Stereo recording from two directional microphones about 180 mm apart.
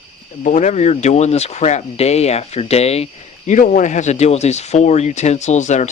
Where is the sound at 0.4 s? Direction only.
40° left (ahead or behind).